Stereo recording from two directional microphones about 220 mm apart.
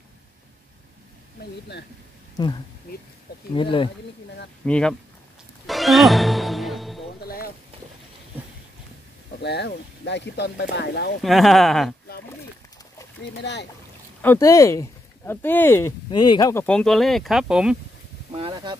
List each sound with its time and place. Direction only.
3.5 s speech: 25° left (ahead or behind)
4.6 s speech: 5° left (ahead or behind)
5.7 s music: centre (ahead or behind)
7.2 s speech: 40° left (ahead or behind)
9.4 s speech: 50° left (ahead or behind)
11.2 s speech: centre (ahead or behind)
13.2 s speech: 50° left (ahead or behind)
14.2 s speech: 10° left (ahead or behind)
16.6 s speech: 5° left (ahead or behind)
18.3 s a sound: 25° right (ahead or behind)